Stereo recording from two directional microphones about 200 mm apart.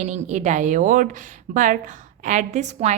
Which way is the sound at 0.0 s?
35° right (ahead or behind).